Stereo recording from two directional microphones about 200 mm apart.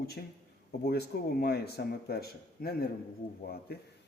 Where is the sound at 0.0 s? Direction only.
50° left (ahead or behind).